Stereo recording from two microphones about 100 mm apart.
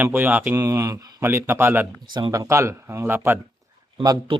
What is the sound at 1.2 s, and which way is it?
Speech, 25° right (ahead or behind).